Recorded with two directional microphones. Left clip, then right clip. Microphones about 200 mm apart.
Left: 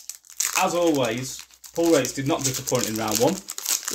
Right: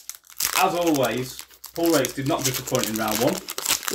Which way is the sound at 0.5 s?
10° right (ahead or behind).